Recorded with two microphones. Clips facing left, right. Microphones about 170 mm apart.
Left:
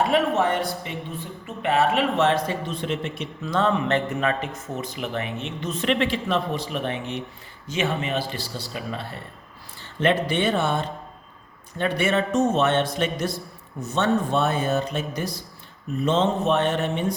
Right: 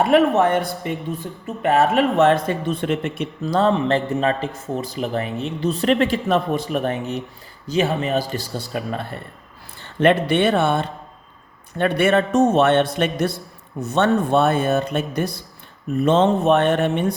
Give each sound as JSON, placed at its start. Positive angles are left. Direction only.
{"t": 0.0, "sound": "speech", "side_deg": -55}
{"t": 3.4, "sound": "a man's voice", "side_deg": -35}